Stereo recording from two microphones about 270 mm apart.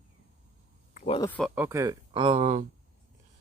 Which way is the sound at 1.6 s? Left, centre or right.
Centre.